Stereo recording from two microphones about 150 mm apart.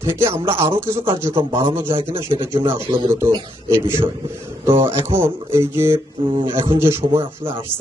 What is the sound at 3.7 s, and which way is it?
Speech, 15° right (ahead or behind).